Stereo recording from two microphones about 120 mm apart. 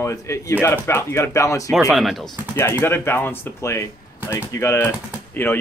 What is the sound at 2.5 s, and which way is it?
Speech, 20° left (ahead or behind).